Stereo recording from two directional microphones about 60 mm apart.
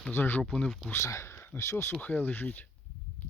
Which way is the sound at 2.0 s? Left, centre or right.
Left.